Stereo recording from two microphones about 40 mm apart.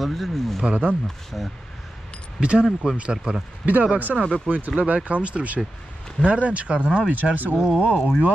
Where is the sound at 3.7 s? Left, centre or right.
Right.